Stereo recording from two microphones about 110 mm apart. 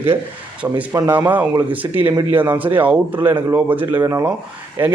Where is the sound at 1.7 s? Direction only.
15° right (ahead or behind).